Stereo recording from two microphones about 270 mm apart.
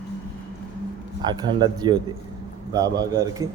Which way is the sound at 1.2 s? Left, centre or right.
Centre.